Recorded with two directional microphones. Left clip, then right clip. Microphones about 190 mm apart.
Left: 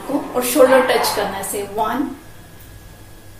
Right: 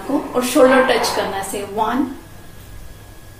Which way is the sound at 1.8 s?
15° right (ahead or behind).